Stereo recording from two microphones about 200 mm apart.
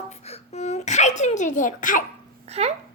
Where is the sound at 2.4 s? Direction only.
30° right (ahead or behind).